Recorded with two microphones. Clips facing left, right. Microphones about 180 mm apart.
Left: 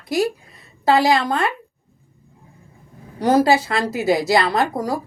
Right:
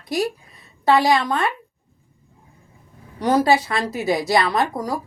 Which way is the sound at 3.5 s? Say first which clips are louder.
Left 1 dB; 25° left (ahead or behind).